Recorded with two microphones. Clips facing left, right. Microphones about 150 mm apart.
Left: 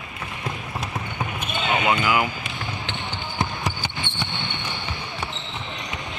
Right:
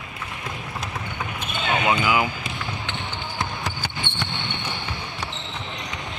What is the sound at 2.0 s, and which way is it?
Speech, 15° right (ahead or behind).